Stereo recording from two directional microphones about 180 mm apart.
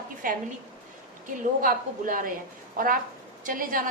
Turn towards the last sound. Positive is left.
turn(degrees=-50)  # may be behind; listen again after turning